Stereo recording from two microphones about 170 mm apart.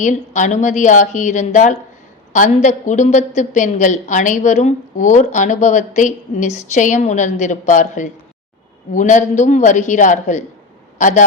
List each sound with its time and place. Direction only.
0.0 s a woman's voice: 45° left (ahead or behind)